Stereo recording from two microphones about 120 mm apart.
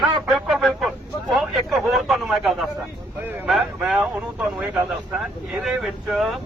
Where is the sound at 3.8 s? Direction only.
10° right (ahead or behind).